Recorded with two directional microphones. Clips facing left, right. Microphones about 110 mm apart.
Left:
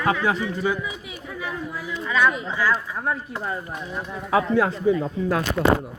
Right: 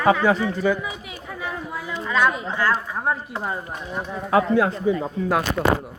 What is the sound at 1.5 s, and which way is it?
Speech, 20° right (ahead or behind).